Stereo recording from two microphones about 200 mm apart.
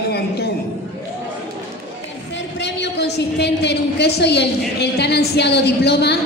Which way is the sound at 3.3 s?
55° left (ahead or behind).